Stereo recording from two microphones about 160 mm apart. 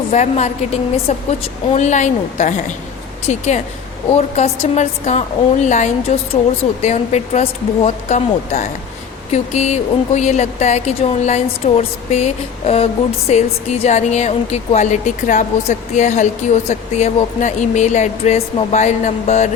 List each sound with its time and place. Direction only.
0.1 s speech: 45° left (ahead or behind)